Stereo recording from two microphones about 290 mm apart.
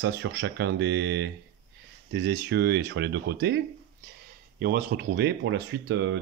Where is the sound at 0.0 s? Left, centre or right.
Right.